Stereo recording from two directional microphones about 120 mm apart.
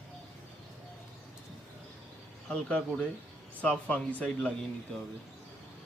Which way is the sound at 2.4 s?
5° left (ahead or behind).